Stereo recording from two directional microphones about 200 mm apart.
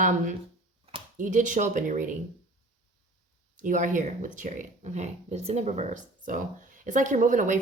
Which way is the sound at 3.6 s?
40° right (ahead or behind).